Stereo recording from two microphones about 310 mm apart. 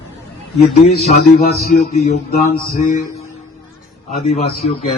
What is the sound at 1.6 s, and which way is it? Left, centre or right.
Mantra, left.